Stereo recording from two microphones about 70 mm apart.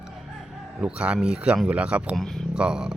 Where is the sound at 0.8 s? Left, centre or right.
Centre.